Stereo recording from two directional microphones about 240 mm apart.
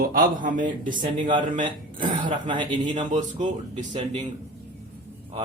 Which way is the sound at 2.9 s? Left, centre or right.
Right.